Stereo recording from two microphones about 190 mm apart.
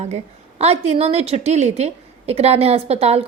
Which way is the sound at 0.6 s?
35° right (ahead or behind).